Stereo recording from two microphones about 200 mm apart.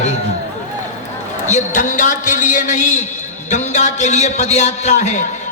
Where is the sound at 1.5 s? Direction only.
40° left (ahead or behind).